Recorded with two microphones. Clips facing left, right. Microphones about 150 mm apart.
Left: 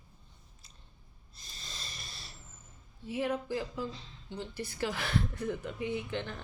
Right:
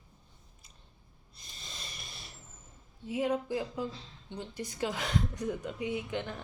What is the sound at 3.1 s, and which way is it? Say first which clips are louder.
Speech: right 2 dB; 15° right (ahead or behind).